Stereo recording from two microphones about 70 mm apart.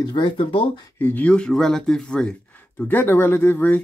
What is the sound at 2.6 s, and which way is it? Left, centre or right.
Speech, left.